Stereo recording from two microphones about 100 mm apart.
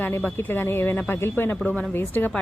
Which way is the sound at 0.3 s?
20° left (ahead or behind).